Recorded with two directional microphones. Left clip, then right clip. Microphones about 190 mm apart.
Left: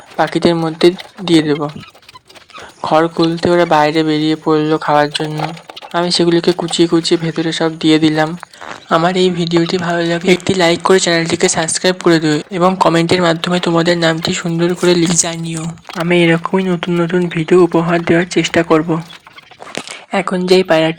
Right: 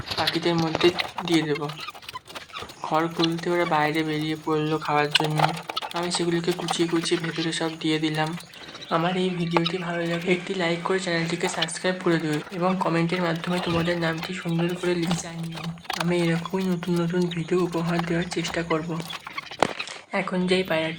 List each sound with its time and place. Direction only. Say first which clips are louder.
0.2 s speech: left 11 dB; 30° left (ahead or behind)
2.8 s speech: left 12 dB; 35° left (ahead or behind)
20.1 s speech: left 12 dB; 35° left (ahead or behind)